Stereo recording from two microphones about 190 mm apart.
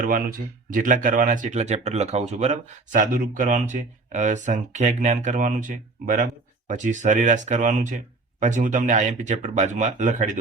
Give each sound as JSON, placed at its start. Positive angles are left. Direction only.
{"t": 0.0, "sound": "speech", "side_deg": -45}